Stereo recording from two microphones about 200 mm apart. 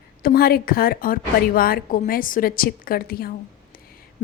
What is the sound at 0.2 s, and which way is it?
A woman's voice, 45° left (ahead or behind).